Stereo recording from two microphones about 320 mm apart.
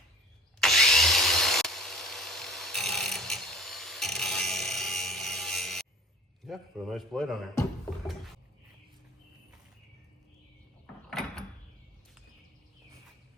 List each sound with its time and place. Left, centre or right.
0.6 s a sound: centre
6.4 s a man's voice: centre
11.1 s door: centre